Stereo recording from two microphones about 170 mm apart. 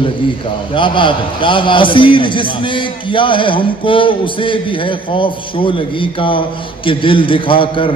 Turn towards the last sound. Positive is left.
turn(degrees=30)  # may be behind; listen again after turning